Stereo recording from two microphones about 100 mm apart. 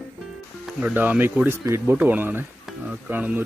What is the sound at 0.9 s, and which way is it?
Speech, 20° right (ahead or behind).